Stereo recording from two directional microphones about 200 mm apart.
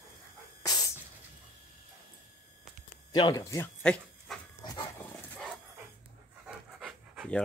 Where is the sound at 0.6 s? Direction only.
20° left (ahead or behind).